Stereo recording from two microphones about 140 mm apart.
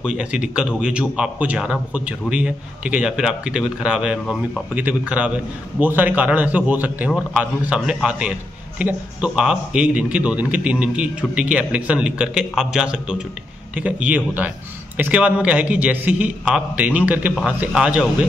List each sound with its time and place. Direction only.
0.0 s a man's voice: 5° right (ahead or behind)